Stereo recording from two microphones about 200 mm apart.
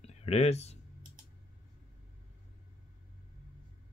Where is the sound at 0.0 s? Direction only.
30° left (ahead or behind).